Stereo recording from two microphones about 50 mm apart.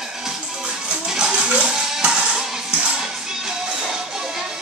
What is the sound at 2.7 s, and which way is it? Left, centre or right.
Music, centre.